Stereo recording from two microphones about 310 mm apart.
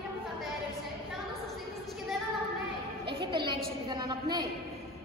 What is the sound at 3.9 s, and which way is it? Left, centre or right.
Speech, centre.